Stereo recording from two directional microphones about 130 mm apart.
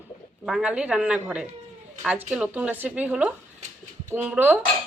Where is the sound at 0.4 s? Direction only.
5° right (ahead or behind).